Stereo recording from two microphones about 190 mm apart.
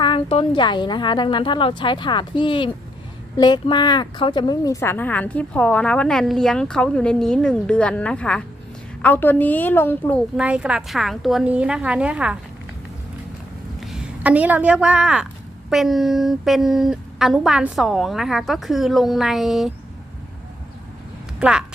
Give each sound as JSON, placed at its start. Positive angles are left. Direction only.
{"t": 0.0, "sound": "a woman's voice", "side_deg": 30}
{"t": 10.3, "sound": "a woman's voice", "side_deg": -5}
{"t": 13.7, "sound": "a woman's voice", "side_deg": 0}
{"t": 21.3, "sound": "speech", "side_deg": -5}